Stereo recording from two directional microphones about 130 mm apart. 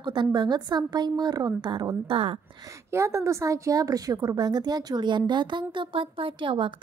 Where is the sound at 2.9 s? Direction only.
20° right (ahead or behind).